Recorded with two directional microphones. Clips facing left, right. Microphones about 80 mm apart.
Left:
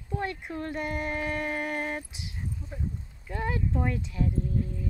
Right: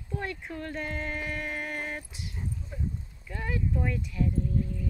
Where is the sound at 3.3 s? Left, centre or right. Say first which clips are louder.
Left 2 dB; left.